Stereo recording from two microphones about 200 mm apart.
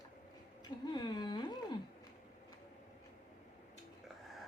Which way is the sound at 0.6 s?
20° left (ahead or behind).